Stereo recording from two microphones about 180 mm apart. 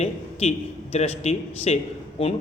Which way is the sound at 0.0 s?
35° left (ahead or behind).